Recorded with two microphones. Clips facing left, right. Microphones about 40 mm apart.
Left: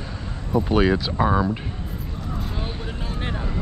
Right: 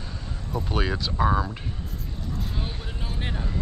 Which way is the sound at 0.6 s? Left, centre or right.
Centre.